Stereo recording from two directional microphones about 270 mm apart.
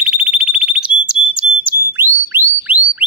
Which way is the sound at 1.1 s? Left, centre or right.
Centre.